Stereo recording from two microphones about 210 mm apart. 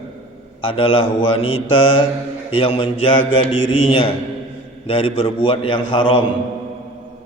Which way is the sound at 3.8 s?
25° left (ahead or behind).